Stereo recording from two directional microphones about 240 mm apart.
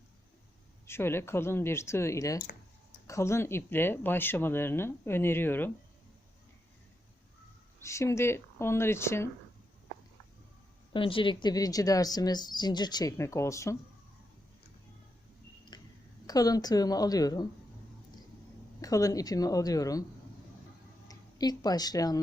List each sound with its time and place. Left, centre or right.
0.9 s a woman's voice: centre
7.8 s a woman's voice: centre
10.9 s a woman's voice: left
16.2 s a woman's voice: centre
18.8 s a woman's voice: centre
21.1 s speech: centre